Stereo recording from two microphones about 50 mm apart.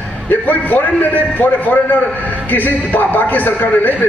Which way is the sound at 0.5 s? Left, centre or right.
Left.